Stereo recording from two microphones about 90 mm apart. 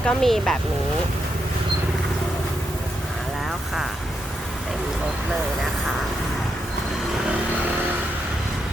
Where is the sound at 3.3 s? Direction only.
5° right (ahead or behind).